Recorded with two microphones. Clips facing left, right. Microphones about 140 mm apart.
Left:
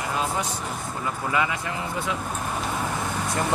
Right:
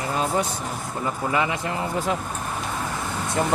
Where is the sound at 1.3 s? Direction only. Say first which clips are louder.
Right 1 dB; 25° right (ahead or behind).